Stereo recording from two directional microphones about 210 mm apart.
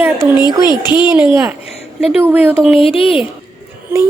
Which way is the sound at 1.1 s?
10° right (ahead or behind).